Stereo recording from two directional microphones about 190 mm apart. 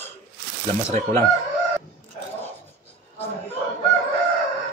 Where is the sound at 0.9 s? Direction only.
35° right (ahead or behind).